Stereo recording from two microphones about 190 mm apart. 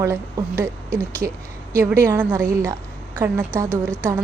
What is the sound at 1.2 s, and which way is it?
A woman's voice, 15° right (ahead or behind).